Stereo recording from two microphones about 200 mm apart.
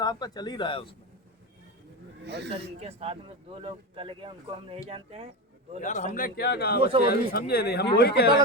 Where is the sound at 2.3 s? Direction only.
55° right (ahead or behind).